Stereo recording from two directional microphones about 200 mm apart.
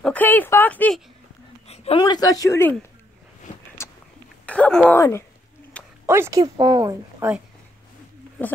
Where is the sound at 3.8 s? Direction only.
15° left (ahead or behind).